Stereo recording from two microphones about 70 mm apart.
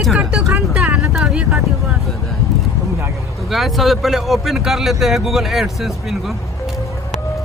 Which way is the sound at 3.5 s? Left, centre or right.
Centre.